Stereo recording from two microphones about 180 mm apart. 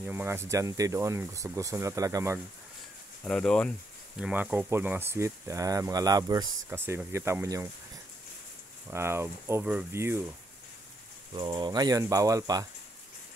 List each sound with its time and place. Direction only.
0.0 s speech: 10° right (ahead or behind)
3.3 s speech: 5° left (ahead or behind)
4.2 s speech: 10° right (ahead or behind)
8.9 s speech: 15° right (ahead or behind)
11.3 s speech: 25° right (ahead or behind)